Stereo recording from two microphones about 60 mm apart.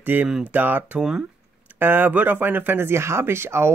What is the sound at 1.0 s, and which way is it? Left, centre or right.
Speech, centre.